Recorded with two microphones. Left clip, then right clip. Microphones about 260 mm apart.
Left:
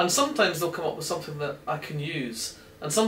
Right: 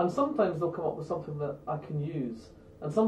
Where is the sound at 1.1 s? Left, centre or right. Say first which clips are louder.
Left 3 dB; centre.